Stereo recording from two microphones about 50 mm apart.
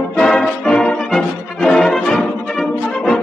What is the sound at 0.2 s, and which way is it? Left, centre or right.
Music, centre.